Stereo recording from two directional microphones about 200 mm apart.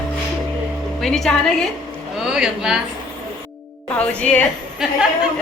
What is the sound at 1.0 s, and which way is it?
Speech, centre (ahead or behind).